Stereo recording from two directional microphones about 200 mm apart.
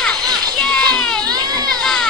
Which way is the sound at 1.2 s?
20° right (ahead or behind).